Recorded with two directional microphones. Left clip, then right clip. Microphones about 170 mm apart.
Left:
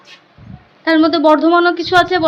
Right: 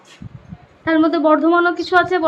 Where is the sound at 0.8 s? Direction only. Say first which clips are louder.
Left 3 dB; 25° left (ahead or behind).